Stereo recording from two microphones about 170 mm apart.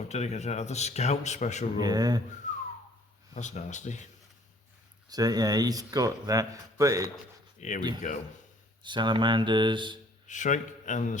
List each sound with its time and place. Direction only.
0.1 s speech: 40° left (ahead or behind)
1.8 s speech: 25° right (ahead or behind)
2.4 s a sound: 45° left (ahead or behind)
3.3 s a man's voice: 45° left (ahead or behind)
5.0 s speech: 25° right (ahead or behind)
7.6 s a man's voice: 45° left (ahead or behind)
8.8 s speech: 25° right (ahead or behind)
10.2 s a man's voice: 45° left (ahead or behind)